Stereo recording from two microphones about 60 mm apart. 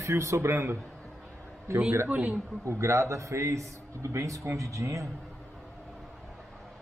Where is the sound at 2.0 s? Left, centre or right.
Right.